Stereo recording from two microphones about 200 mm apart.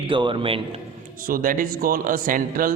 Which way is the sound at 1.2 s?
45° right (ahead or behind).